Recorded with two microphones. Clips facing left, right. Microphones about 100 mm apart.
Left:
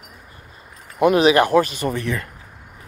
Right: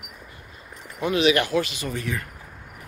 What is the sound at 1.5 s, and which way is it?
Speech, 50° left (ahead or behind).